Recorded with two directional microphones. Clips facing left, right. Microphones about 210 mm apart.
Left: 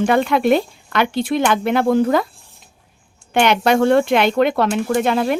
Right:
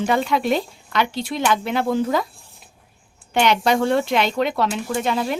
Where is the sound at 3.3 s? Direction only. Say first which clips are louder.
Left 3 dB; 55° left (ahead or behind).